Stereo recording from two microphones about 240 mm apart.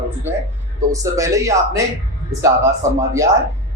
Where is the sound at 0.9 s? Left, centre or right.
Centre.